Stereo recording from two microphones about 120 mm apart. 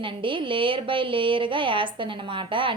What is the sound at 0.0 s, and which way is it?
A woman's voice, 45° right (ahead or behind).